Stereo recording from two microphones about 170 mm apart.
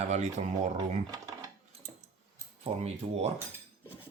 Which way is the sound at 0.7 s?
20° right (ahead or behind).